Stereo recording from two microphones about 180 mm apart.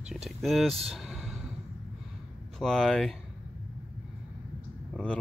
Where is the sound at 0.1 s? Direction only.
Centre (ahead or behind).